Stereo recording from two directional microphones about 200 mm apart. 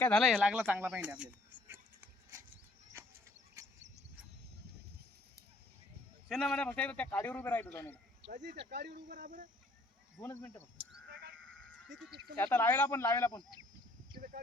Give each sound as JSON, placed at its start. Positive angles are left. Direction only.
{"t": 0.0, "sound": "speech", "side_deg": 0}
{"t": 3.0, "sound": "a sound", "side_deg": -15}
{"t": 6.2, "sound": "a man's voice", "side_deg": 0}
{"t": 8.4, "sound": "speech", "side_deg": -55}
{"t": 10.2, "sound": "a man's voice", "side_deg": 10}
{"t": 11.1, "sound": "sheep", "side_deg": -50}
{"t": 12.4, "sound": "a man's voice", "side_deg": 10}